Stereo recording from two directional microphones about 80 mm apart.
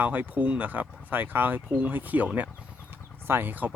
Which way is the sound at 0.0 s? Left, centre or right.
Right.